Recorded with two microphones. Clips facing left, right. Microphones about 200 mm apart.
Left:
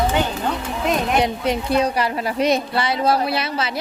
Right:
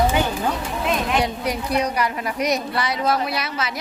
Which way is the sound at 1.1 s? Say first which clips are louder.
Left 3 dB; 25° left (ahead or behind).